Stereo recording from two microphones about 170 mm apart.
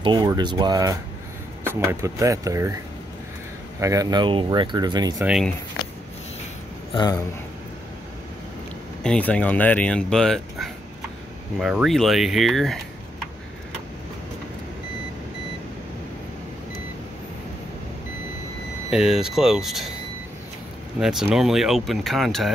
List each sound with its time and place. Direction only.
0.0 s speech: 25° right (ahead or behind)
3.8 s speech: 20° right (ahead or behind)
5.2 s speech: 5° right (ahead or behind)
6.9 s a man's voice: 25° left (ahead or behind)
9.0 s speech: 5° left (ahead or behind)
18.9 s speech: 5° right (ahead or behind)
21.0 s speech: 5° right (ahead or behind)